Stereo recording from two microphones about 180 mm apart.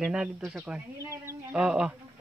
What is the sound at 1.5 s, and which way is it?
Speech, 5° right (ahead or behind).